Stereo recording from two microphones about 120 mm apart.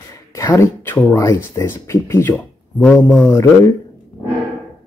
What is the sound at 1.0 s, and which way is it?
Speech, 25° left (ahead or behind).